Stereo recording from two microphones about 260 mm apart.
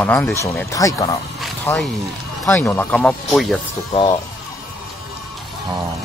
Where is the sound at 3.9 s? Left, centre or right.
Centre.